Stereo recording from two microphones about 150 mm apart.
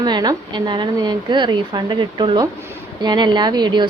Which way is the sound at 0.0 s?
30° right (ahead or behind).